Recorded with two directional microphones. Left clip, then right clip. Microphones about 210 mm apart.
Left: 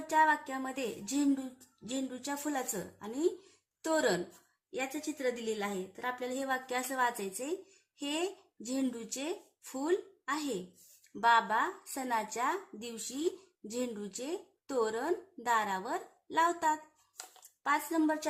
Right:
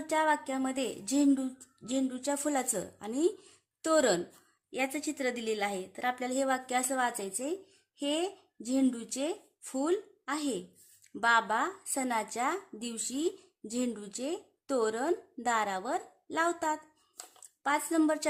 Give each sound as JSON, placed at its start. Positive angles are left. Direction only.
{"t": 0.1, "sound": "a woman's voice", "side_deg": -35}